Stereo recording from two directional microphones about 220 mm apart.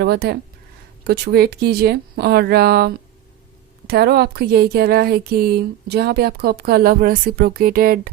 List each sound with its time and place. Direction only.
0.0 s speech: 45° right (ahead or behind)